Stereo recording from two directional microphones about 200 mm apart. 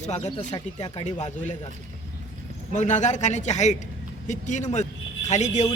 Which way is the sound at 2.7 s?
35° left (ahead or behind).